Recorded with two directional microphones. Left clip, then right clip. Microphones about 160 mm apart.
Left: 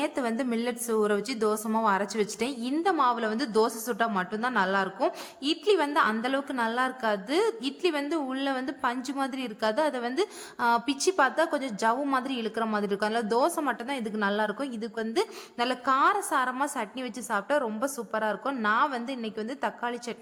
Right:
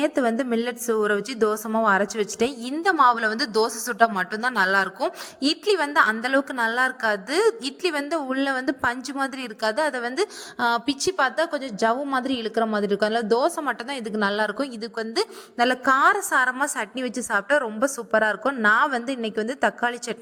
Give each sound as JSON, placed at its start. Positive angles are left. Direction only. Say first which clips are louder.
{"t": 0.0, "sound": "a woman's voice", "louder": "right 7 dB", "side_deg": -25}
{"t": 3.0, "sound": "a woman's voice", "louder": "right 7 dB", "side_deg": -40}